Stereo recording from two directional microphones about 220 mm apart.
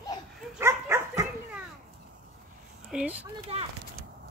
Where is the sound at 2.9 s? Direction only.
5° right (ahead or behind).